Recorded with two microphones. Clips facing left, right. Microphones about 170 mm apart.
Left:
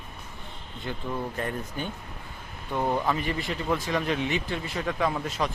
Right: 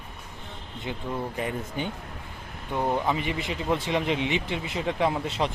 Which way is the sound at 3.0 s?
20° right (ahead or behind).